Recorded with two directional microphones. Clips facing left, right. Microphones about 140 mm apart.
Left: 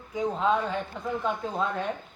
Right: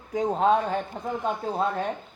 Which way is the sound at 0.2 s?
50° right (ahead or behind).